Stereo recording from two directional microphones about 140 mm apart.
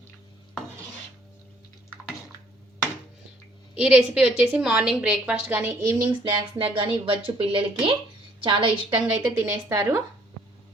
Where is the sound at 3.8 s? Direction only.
10° right (ahead or behind).